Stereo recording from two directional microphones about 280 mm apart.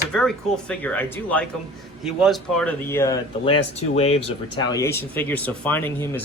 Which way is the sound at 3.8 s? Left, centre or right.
Left.